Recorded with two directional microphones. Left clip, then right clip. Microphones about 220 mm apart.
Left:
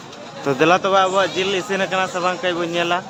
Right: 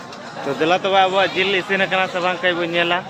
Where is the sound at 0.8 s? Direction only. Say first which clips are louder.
Right 1 dB; 15° left (ahead or behind).